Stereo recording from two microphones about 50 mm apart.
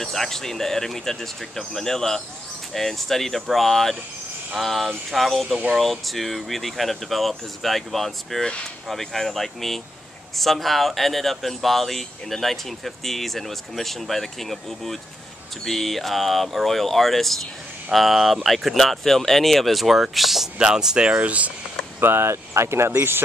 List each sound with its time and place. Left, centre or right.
0.0 s speech: centre
20.5 s speech: centre
22.0 s speech: right